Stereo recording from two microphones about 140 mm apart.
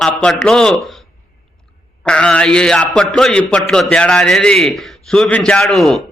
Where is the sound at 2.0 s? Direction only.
5° left (ahead or behind).